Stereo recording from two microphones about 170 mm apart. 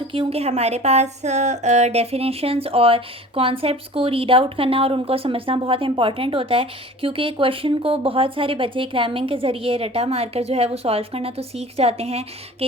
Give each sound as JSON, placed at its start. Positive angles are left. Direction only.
{"t": 0.1, "sound": "a woman's voice", "side_deg": -35}